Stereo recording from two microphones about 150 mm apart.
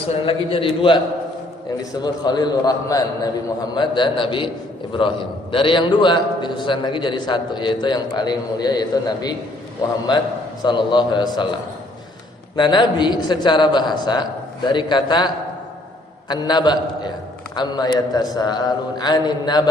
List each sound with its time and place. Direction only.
0.1 s a man's voice: 35° left (ahead or behind)
2.0 s a man's voice: 30° left (ahead or behind)
10.6 s a man's voice: 30° left (ahead or behind)
12.5 s a man's voice: 30° left (ahead or behind)
16.3 s a man's voice: 30° left (ahead or behind)